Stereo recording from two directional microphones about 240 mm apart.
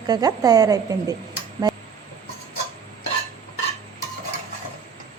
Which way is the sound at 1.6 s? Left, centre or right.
Centre.